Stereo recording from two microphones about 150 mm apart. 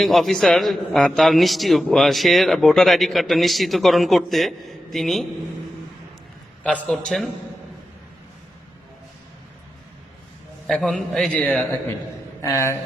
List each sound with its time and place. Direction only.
0.0 s a man's voice: centre (ahead or behind)
6.6 s a man's voice: 10° left (ahead or behind)
10.7 s a man's voice: 5° left (ahead or behind)
12.4 s speech: 20° left (ahead or behind)